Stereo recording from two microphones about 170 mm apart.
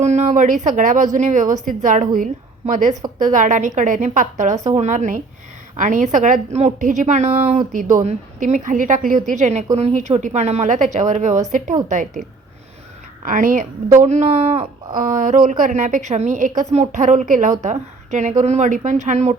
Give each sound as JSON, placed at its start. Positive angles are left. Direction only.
{"t": 0.0, "sound": "a woman's voice", "side_deg": -45}
{"t": 7.7, "sound": "a woman's voice", "side_deg": -50}
{"t": 13.2, "sound": "a woman's voice", "side_deg": -50}
{"t": 14.9, "sound": "a woman's voice", "side_deg": -50}